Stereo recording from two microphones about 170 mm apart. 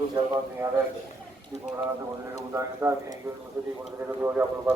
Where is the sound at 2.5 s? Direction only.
15° right (ahead or behind).